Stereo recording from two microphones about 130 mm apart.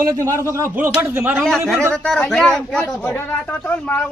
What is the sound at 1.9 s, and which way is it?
Speech, 5° left (ahead or behind).